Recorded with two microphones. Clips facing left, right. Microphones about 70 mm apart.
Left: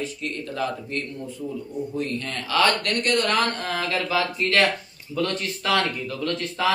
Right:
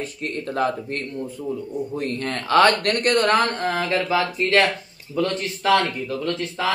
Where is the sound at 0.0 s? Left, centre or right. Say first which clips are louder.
Right 2 dB; right.